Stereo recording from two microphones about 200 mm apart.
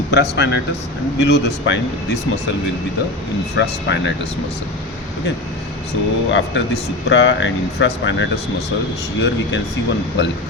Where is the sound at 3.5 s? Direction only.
60° left (ahead or behind).